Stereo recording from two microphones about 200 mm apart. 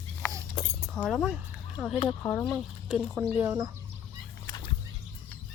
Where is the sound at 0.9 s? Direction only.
Centre (ahead or behind).